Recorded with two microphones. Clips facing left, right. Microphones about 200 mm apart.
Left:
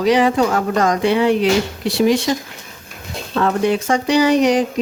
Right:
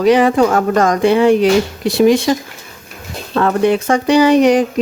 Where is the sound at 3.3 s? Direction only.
55° right (ahead or behind).